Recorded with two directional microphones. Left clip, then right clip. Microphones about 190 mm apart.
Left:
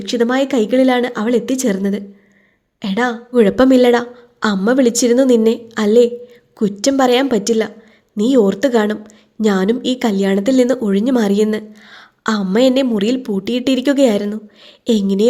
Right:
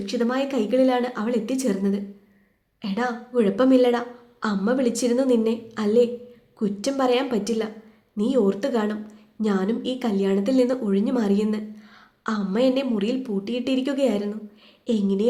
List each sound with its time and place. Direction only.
0.0 s a woman's voice: 45° left (ahead or behind)